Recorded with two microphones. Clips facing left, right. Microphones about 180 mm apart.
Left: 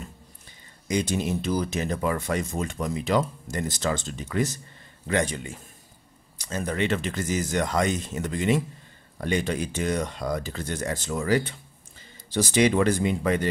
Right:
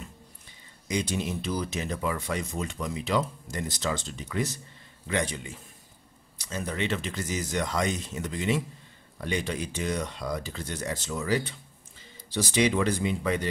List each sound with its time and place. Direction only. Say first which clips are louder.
0.8 s speech: left 4 dB; 45° left (ahead or behind)